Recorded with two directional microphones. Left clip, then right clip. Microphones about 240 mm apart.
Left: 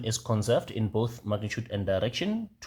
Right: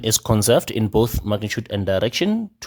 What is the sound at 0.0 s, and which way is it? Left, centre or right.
Speech, right.